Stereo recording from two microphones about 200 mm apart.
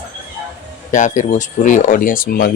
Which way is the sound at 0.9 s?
40° left (ahead or behind).